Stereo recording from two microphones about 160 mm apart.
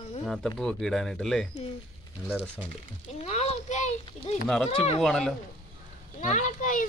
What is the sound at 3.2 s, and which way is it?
Speech, 45° left (ahead or behind).